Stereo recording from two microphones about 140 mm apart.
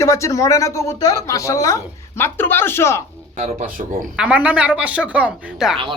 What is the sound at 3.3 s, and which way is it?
Speech, 55° right (ahead or behind).